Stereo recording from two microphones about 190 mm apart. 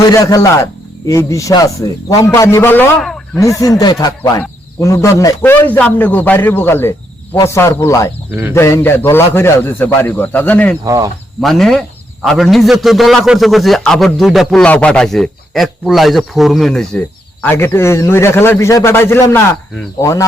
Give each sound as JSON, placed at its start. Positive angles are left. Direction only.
{"t": 0.1, "sound": "speech", "side_deg": 15}
{"t": 8.3, "sound": "speech", "side_deg": -10}
{"t": 8.5, "sound": "speech", "side_deg": 10}
{"t": 10.8, "sound": "speech", "side_deg": -15}
{"t": 11.3, "sound": "a man's voice", "side_deg": 0}